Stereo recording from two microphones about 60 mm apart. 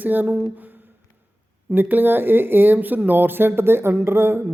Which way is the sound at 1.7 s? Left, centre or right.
Right.